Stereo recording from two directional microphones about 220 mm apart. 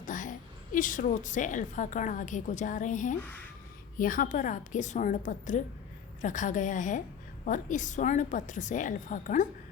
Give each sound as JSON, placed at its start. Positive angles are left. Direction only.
{"t": 0.0, "sound": "a woman's voice", "side_deg": 35}